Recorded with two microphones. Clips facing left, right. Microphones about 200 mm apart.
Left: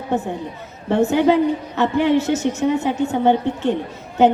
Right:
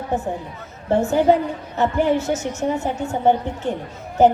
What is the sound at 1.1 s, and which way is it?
A woman's voice, 70° left (ahead or behind).